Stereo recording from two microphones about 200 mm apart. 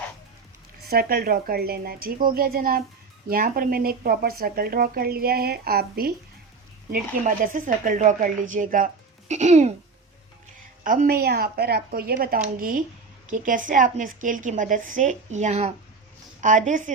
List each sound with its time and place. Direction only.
0.9 s a woman's voice: 50° right (ahead or behind)
10.8 s a woman's voice: 45° right (ahead or behind)